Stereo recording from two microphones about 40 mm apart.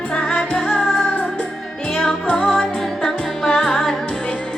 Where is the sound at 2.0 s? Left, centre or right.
Centre.